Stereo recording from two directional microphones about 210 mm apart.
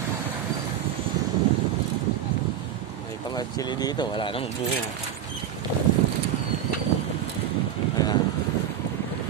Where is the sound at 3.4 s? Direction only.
20° left (ahead or behind).